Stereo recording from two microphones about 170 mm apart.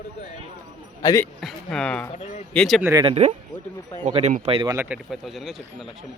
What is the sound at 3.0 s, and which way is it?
Speech, 35° right (ahead or behind).